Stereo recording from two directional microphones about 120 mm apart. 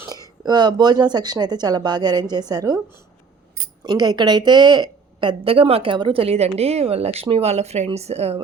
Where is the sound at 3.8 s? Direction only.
35° right (ahead or behind).